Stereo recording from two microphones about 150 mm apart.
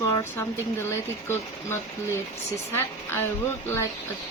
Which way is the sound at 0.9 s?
15° left (ahead or behind).